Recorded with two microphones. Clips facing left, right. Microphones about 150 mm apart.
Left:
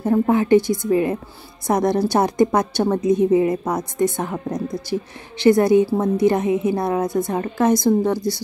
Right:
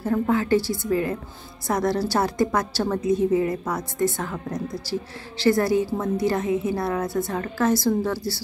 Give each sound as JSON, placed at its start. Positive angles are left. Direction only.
{"t": 0.0, "sound": "a woman's voice", "side_deg": 20}